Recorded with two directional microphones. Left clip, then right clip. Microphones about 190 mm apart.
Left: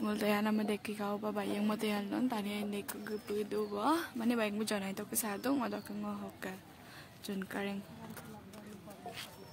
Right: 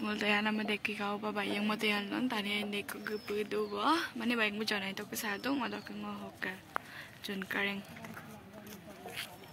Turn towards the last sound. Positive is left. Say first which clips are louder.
# right 5 dB
turn(degrees=30)  # may be behind; listen again after turning